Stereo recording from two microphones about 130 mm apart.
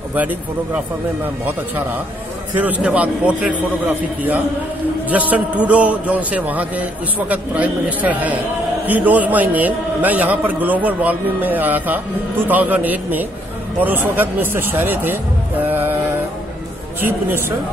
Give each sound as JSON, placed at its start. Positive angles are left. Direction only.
{"t": 0.1, "sound": "a man's voice", "side_deg": -10}